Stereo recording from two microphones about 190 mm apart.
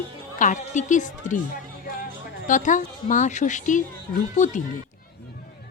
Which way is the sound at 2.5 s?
40° left (ahead or behind).